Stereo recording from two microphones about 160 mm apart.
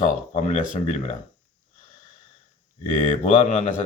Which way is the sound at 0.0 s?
50° left (ahead or behind).